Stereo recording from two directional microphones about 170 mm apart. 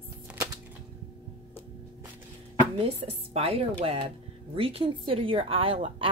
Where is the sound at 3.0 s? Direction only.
35° right (ahead or behind).